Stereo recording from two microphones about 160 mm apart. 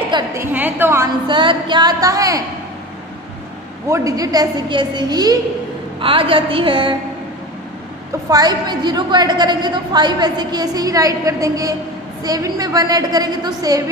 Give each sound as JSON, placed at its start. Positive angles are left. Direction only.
{"t": 0.3, "sound": "a woman's voice", "side_deg": -15}
{"t": 1.2, "sound": "a woman's voice", "side_deg": -30}
{"t": 3.9, "sound": "a woman's voice", "side_deg": -20}
{"t": 8.3, "sound": "a woman's voice", "side_deg": -25}